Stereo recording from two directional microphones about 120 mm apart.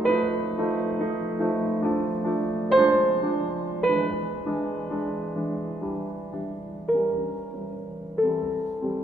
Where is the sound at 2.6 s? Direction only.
Centre (ahead or behind).